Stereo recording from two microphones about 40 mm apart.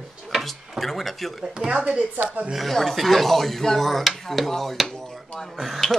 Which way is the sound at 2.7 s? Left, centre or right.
Centre.